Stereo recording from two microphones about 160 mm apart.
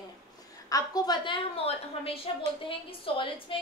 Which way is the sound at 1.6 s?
35° left (ahead or behind).